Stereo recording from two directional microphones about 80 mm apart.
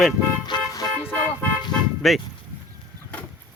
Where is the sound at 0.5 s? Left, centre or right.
Left.